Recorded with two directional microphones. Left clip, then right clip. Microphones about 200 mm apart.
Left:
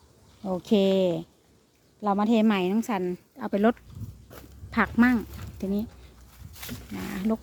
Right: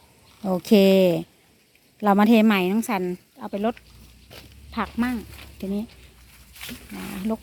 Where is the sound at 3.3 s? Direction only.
20° left (ahead or behind).